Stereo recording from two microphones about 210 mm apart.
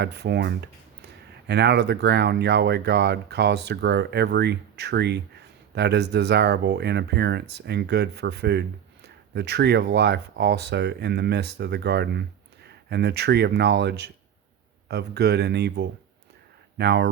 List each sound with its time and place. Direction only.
0.0 s speech: 50° right (ahead or behind)